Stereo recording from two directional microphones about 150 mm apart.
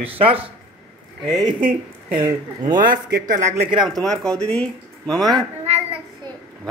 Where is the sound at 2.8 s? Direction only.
70° right (ahead or behind).